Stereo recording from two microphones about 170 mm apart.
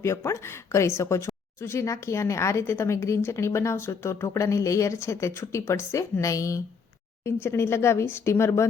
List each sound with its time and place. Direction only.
0.0 s speech: 15° left (ahead or behind)